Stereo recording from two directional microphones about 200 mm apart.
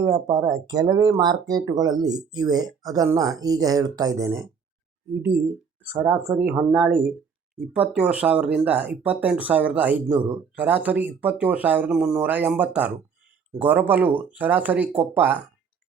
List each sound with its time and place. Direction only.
0.0 s speech: 20° right (ahead or behind)